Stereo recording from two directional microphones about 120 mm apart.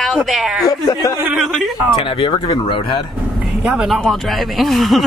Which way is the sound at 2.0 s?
45° left (ahead or behind).